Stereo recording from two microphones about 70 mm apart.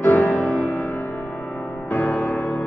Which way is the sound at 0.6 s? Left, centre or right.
Left.